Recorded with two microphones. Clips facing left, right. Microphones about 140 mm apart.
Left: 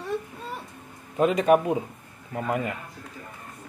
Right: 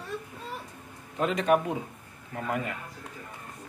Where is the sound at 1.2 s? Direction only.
5° left (ahead or behind).